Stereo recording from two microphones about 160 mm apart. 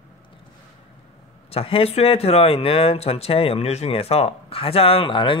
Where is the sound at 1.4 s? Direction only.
35° left (ahead or behind).